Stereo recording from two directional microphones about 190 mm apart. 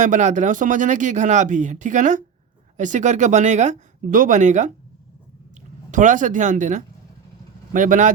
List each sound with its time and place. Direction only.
0.0 s speech: 40° right (ahead or behind)
5.9 s a man's voice: 40° right (ahead or behind)